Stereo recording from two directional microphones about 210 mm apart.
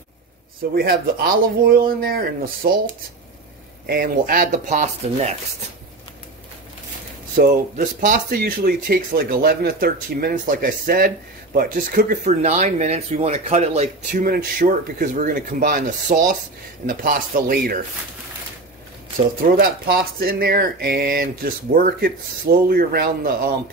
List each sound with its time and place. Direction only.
0.7 s speech: 45° right (ahead or behind)
3.8 s speech: 45° right (ahead or behind)
7.3 s speech: 40° right (ahead or behind)
19.6 s speech: 45° right (ahead or behind)